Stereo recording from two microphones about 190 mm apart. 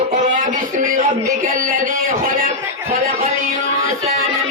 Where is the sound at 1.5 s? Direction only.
45° right (ahead or behind).